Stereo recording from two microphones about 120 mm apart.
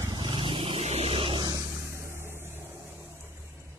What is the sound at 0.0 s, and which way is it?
Vehicle, 40° right (ahead or behind).